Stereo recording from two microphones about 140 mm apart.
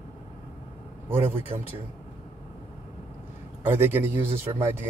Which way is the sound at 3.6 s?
15° right (ahead or behind).